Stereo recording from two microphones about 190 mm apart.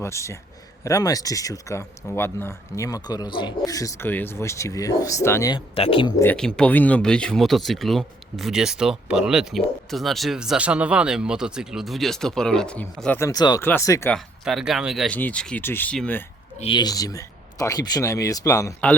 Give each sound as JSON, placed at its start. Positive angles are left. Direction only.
{"t": 0.0, "sound": "speech", "side_deg": 15}
{"t": 6.2, "sound": "speech", "side_deg": 5}
{"t": 14.1, "sound": "speech", "side_deg": 0}
{"t": 16.6, "sound": "speech", "side_deg": 25}